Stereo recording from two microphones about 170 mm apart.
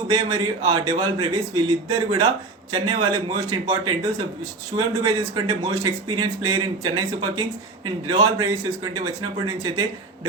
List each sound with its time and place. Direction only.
0.1 s speech: 25° right (ahead or behind)